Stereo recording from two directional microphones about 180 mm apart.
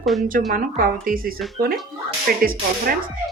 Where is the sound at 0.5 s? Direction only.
50° right (ahead or behind).